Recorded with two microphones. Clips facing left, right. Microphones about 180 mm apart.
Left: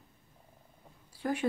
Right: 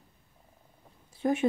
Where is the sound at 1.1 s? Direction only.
20° right (ahead or behind).